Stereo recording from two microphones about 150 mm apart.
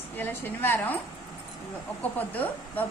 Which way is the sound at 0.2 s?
10° left (ahead or behind).